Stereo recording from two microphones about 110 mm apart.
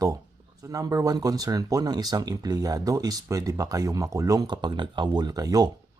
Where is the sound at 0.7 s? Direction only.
35° right (ahead or behind).